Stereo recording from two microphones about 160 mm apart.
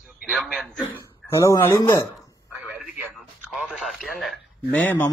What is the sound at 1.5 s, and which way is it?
Mantra, 20° left (ahead or behind).